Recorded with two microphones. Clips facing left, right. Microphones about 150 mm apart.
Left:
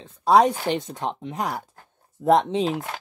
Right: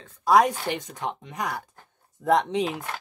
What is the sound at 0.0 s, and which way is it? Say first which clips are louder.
Speech: left 2 dB; 30° left (ahead or behind).